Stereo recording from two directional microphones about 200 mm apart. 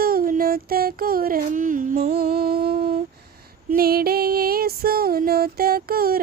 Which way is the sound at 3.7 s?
50° right (ahead or behind).